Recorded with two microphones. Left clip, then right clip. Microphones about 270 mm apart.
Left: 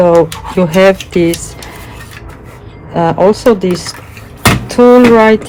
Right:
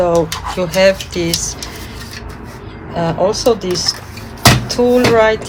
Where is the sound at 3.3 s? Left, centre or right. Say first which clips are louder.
Left 4 dB; left.